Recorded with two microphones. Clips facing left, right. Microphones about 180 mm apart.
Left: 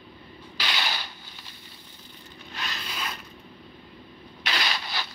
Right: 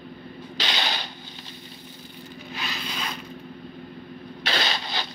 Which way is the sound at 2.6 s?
5° left (ahead or behind).